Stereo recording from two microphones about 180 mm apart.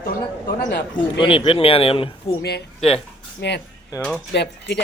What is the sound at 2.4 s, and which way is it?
A man's voice, 65° left (ahead or behind).